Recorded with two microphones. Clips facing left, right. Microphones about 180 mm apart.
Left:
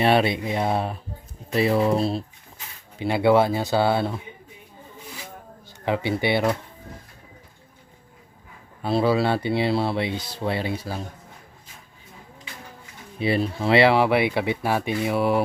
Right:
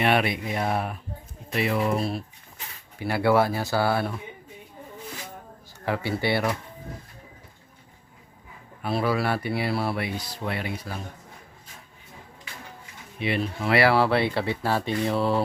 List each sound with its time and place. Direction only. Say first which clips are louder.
0.0 s speech: left 4 dB; 30° left (ahead or behind)
5.8 s speech: left 3 dB; 20° left (ahead or behind)
8.8 s speech: left 4 dB; 25° left (ahead or behind)
13.1 s speech: left 4 dB; 35° left (ahead or behind); by 15.4 s 10° left (ahead or behind)